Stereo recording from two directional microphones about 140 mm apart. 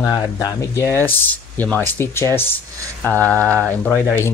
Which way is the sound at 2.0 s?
15° left (ahead or behind).